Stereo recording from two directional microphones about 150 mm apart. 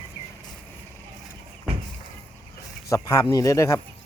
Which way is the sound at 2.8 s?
20° left (ahead or behind).